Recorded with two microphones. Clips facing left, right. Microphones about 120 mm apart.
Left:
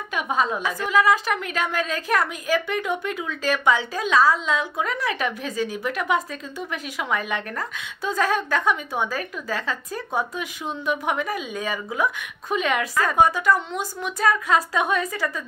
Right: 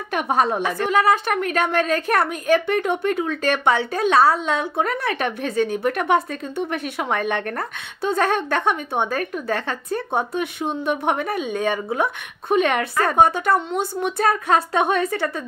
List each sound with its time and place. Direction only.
0.1 s a woman's voice: 65° right (ahead or behind)
13.1 s speech: 30° right (ahead or behind)
14.9 s a woman's voice: 60° right (ahead or behind)